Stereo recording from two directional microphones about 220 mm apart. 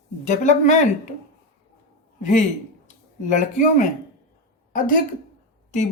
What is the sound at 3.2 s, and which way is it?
Speech, 35° left (ahead or behind).